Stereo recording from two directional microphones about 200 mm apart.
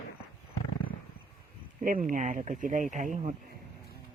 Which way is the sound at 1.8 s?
40° right (ahead or behind).